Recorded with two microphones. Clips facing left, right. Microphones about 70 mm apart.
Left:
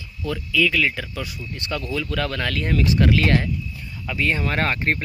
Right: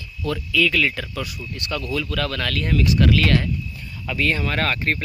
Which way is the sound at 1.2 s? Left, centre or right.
Left.